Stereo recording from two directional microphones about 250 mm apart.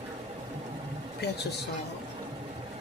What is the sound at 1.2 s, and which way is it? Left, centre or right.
Speech, left.